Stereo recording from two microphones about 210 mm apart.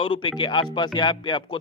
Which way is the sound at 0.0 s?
25° left (ahead or behind).